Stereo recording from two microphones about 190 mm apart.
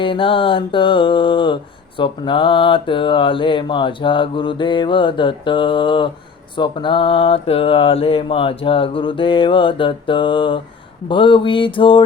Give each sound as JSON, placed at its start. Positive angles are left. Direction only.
{"t": 0.0, "sound": "mantra", "side_deg": 25}